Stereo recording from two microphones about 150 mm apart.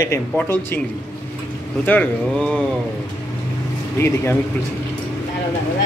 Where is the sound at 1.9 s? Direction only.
10° left (ahead or behind).